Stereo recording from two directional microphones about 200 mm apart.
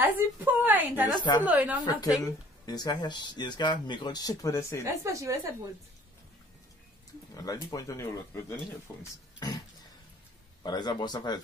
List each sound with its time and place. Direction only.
0.0 s a woman's voice: 10° right (ahead or behind)
1.1 s speech: 20° left (ahead or behind)
1.4 s a woman's voice: 5° right (ahead or behind)
2.6 s speech: 20° left (ahead or behind)
5.0 s a woman's voice: 15° right (ahead or behind)
7.3 s speech: 15° left (ahead or behind)
9.4 s throat clearing: 20° left (ahead or behind)
10.6 s speech: 20° left (ahead or behind)